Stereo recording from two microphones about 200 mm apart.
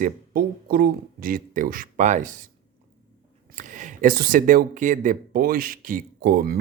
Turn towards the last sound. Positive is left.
turn(degrees=-50)  # may be behind; listen again after turning